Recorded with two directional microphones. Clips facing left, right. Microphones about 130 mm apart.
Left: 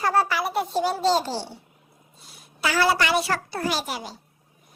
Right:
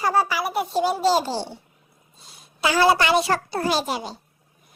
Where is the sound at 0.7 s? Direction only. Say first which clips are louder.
Right 3 dB; 15° right (ahead or behind).